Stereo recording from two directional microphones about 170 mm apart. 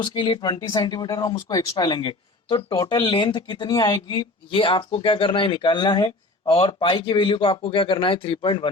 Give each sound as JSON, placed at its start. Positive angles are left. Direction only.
{"t": 0.0, "sound": "speech", "side_deg": 30}